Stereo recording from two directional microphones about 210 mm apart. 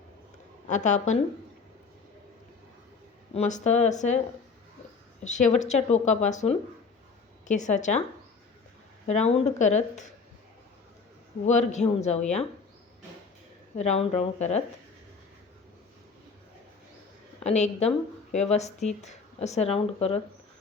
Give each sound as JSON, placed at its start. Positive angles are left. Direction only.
{"t": 0.7, "sound": "speech", "side_deg": 35}
{"t": 3.3, "sound": "speech", "side_deg": 35}
{"t": 5.2, "sound": "speech", "side_deg": 35}
{"t": 9.0, "sound": "speech", "side_deg": 30}
{"t": 11.4, "sound": "speech", "side_deg": 35}
{"t": 13.7, "sound": "speech", "side_deg": 30}
{"t": 17.4, "sound": "speech", "side_deg": 35}